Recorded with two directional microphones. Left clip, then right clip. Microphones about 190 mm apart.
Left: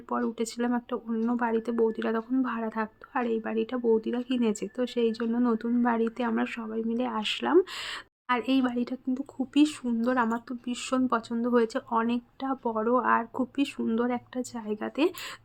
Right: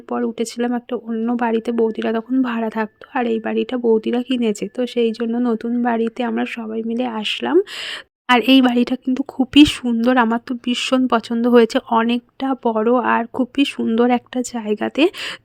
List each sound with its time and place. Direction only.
0.1 s speech: 30° right (ahead or behind)
8.3 s speech: 50° right (ahead or behind)